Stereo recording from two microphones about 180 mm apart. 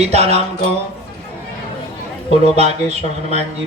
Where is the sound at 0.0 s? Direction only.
35° right (ahead or behind).